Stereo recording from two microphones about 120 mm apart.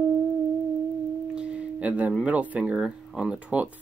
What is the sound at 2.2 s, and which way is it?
Speech, 10° right (ahead or behind).